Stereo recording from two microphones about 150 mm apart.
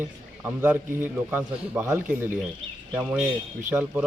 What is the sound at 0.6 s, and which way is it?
A man's voice, 10° right (ahead or behind).